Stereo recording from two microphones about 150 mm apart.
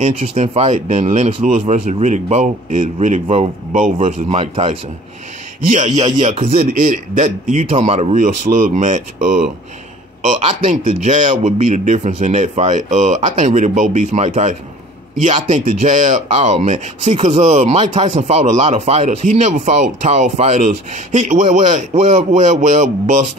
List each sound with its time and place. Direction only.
0.0 s speech: 50° right (ahead or behind)
3.7 s speech: 60° right (ahead or behind)
4.3 s speech: 40° right (ahead or behind)
5.7 s speech: 55° right (ahead or behind)
6.5 s speech: 65° right (ahead or behind)